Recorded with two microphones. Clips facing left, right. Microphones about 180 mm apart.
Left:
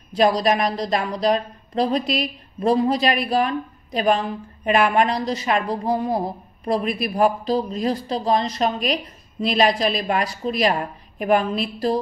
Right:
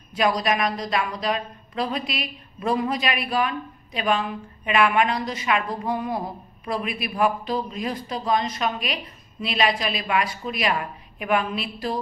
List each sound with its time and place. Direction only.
0.1 s a woman's voice: 35° left (ahead or behind)